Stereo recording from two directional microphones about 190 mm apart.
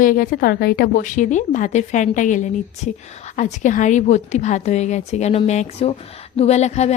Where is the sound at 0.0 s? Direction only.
45° left (ahead or behind).